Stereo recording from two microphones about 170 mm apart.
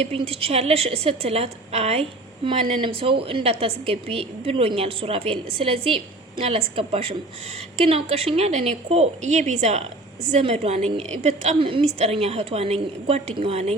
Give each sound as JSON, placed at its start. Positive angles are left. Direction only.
{"t": 0.0, "sound": "a woman's voice", "side_deg": -35}